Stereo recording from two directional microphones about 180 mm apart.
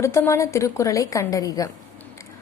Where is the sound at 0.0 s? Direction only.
15° left (ahead or behind).